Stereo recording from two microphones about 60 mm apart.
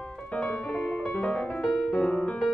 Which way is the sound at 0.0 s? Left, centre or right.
Centre.